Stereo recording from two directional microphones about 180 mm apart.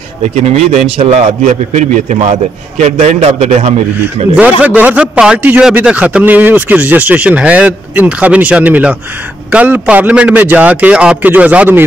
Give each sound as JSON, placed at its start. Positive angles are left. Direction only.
{"t": 0.5, "sound": "a man's voice", "side_deg": -35}
{"t": 4.4, "sound": "a man's voice", "side_deg": -10}